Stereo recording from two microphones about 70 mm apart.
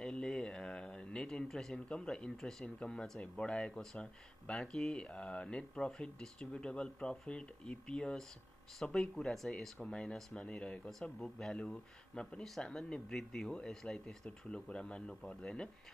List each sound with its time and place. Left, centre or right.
0.0 s speech: centre